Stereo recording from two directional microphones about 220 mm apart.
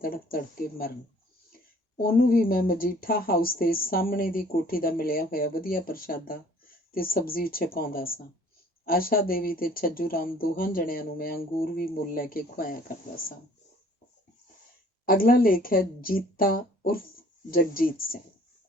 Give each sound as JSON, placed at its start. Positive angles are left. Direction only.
{"t": 0.0, "sound": "speech", "side_deg": 40}
{"t": 2.0, "sound": "speech", "side_deg": 40}
{"t": 15.0, "sound": "speech", "side_deg": 40}